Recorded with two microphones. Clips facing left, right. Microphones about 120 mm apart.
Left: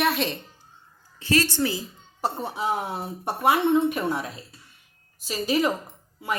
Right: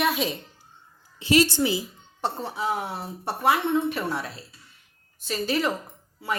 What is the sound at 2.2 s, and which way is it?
A woman's voice, 15° left (ahead or behind).